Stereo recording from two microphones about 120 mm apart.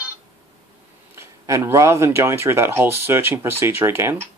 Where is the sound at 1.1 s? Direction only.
20° right (ahead or behind).